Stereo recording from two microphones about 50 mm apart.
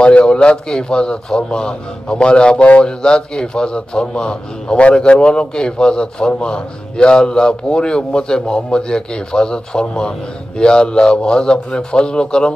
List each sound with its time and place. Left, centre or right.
0.0 s a man's voice: centre